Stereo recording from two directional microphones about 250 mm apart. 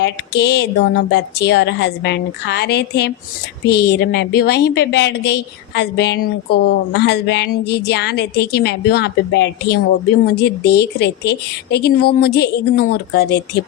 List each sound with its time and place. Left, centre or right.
0.0 s a woman's voice: left